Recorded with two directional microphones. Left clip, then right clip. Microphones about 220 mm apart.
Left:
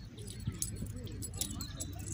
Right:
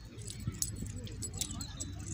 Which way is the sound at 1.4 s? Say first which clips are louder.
Right 1 dB; 10° right (ahead or behind).